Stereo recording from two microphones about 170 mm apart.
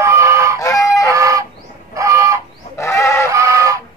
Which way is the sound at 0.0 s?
15° right (ahead or behind).